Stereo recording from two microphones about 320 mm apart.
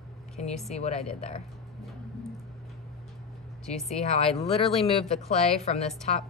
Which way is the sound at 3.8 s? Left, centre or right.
Centre.